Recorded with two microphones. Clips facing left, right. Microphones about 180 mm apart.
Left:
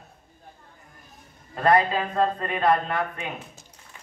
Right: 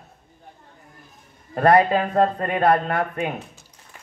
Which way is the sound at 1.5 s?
50° right (ahead or behind).